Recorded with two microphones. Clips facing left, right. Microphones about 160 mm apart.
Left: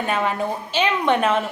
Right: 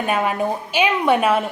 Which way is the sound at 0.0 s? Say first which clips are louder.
Right 2 dB; 10° right (ahead or behind).